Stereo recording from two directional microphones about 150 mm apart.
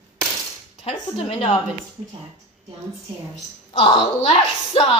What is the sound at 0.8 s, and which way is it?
Speech, 40° left (ahead or behind).